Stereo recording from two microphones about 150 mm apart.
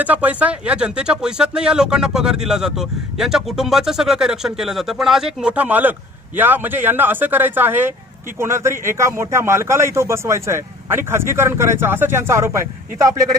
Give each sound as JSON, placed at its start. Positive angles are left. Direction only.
{"t": 0.0, "sound": "speech", "side_deg": -10}